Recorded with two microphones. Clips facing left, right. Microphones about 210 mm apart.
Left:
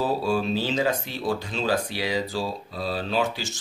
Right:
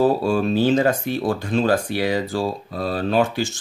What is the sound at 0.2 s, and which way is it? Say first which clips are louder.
Speech: right 6 dB; 50° right (ahead or behind).